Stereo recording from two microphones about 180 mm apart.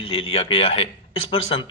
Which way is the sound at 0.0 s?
30° left (ahead or behind).